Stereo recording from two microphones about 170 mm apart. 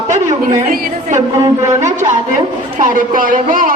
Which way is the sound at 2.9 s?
55° right (ahead or behind).